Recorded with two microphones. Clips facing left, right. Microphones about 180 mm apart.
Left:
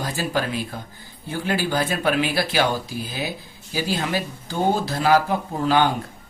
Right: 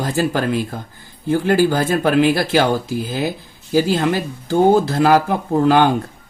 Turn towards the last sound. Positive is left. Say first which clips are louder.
# right 6 dB
turn(degrees=-55)  # may be behind; listen again after turning